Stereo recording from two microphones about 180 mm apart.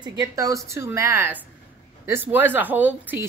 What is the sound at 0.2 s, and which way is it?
Speech, 20° right (ahead or behind).